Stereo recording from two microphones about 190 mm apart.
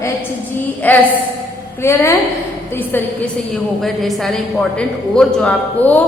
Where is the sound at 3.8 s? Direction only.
Centre (ahead or behind).